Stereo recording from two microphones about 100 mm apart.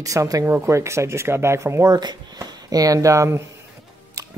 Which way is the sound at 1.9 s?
45° right (ahead or behind).